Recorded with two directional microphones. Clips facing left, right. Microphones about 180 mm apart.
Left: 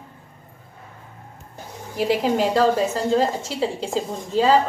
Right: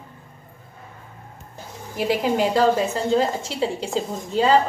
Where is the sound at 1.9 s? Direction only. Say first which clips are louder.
Left 1 dB; centre (ahead or behind).